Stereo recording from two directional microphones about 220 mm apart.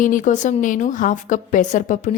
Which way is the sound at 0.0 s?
35° left (ahead or behind).